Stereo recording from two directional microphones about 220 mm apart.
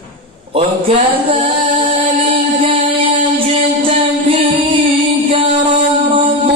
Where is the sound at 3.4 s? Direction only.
25° right (ahead or behind).